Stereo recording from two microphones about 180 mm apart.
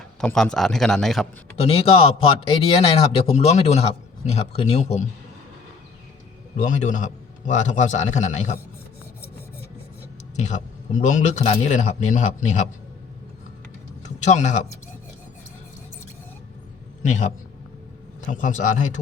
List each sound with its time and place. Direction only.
0.2 s a man's voice: 5° left (ahead or behind)
1.5 s speech: 35° left (ahead or behind)
6.6 s a man's voice: 45° left (ahead or behind)
10.3 s speech: 40° left (ahead or behind)
14.0 s speech: 40° left (ahead or behind)
17.1 s a man's voice: 45° left (ahead or behind)